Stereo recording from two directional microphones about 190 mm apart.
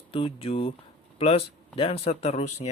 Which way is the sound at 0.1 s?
30° left (ahead or behind).